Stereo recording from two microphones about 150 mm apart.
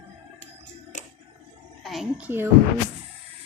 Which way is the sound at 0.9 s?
55° left (ahead or behind).